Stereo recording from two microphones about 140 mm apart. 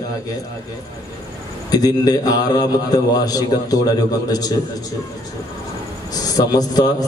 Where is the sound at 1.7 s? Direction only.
30° left (ahead or behind).